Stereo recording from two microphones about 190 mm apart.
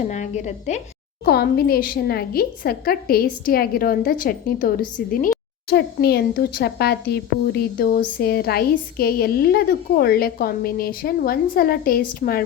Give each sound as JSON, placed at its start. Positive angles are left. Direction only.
{"t": 0.0, "sound": "a woman's voice", "side_deg": 40}
{"t": 1.2, "sound": "a woman's voice", "side_deg": 55}
{"t": 5.6, "sound": "a woman's voice", "side_deg": 55}